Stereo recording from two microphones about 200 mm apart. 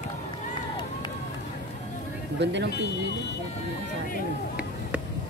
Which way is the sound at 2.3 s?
60° right (ahead or behind).